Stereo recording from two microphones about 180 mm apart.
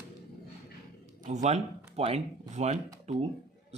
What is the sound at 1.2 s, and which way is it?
Speech, 40° right (ahead or behind).